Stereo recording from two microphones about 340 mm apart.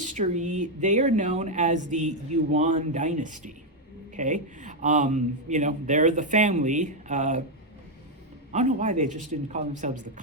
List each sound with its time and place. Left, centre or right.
0.0 s speech: right
8.5 s speech: right